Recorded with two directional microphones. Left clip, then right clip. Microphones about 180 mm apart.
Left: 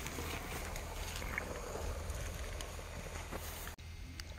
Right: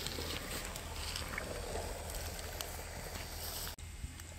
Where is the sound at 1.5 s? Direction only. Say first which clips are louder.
Right 2 dB; 15° left (ahead or behind).